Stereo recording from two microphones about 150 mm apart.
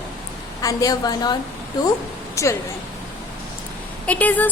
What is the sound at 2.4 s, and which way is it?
Speech, 20° left (ahead or behind).